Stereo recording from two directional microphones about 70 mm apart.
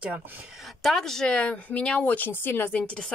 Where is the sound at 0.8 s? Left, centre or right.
Centre; by 2.8 s left.